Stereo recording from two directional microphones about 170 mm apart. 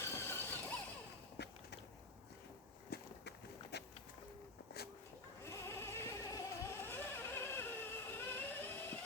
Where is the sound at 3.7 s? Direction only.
80° left.